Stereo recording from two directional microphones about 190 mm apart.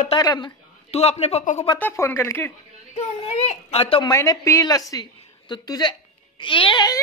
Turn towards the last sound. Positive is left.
turn(degrees=25)  # may be behind; listen again after turning